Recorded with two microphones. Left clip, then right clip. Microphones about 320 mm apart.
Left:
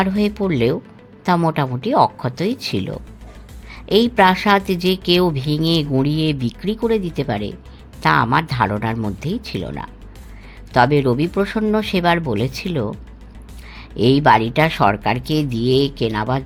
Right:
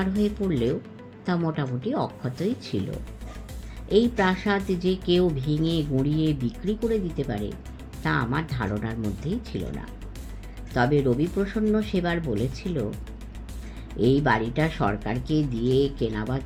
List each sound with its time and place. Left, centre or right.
0.0 s a woman's voice: left
10.8 s a woman's voice: left
14.0 s a woman's voice: left